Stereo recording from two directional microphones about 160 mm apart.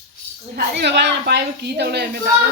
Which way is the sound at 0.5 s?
90° right.